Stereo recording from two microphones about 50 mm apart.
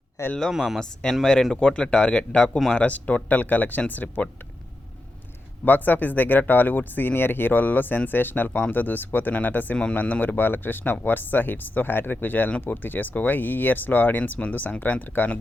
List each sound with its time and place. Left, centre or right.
0.2 s speech: left
0.5 s speech: centre
1.2 s speech: centre; by 4.3 s left
5.6 s speech: left
10.4 s speech: left